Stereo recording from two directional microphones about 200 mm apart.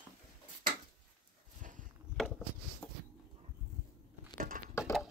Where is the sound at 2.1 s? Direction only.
5° left (ahead or behind).